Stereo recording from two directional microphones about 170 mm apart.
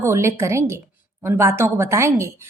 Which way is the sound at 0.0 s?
15° right (ahead or behind).